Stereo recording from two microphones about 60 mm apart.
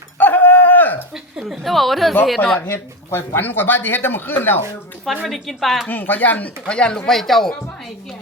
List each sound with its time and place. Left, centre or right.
0.2 s dog: left
1.1 s a sound: centre
2.6 s speech: left
5.0 s speech: centre
5.9 s speech: left
7.1 s speech: centre